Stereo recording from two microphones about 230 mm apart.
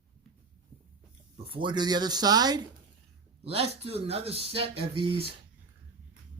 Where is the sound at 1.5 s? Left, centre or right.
Right.